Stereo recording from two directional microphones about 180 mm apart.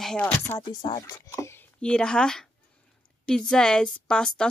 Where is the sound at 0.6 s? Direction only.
20° left (ahead or behind).